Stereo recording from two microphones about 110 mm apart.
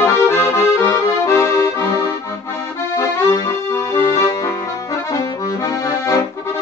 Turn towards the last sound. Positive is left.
turn(degrees=25)  # may be behind; listen again after turning